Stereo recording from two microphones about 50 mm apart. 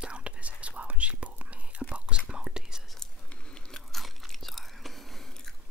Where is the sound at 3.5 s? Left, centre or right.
Centre.